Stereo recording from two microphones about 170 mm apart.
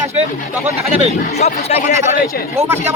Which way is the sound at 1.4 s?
45° left (ahead or behind).